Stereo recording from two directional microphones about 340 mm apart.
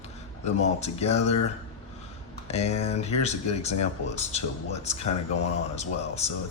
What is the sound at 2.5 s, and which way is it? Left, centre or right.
Speech, centre.